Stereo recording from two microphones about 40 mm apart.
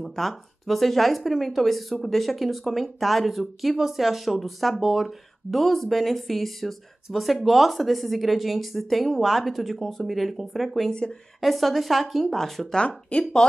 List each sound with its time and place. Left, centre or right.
0.0 s speech: centre
12.7 s speech: left